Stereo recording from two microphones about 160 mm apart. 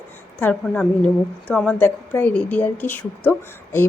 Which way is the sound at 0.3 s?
10° left (ahead or behind).